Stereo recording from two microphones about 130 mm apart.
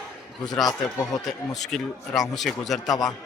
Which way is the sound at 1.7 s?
Centre (ahead or behind).